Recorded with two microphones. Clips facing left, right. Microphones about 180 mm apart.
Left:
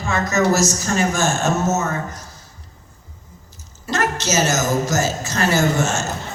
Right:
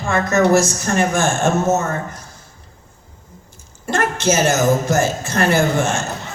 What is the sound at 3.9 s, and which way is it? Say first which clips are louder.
A woman's voice: right 3 dB; 55° right (ahead or behind).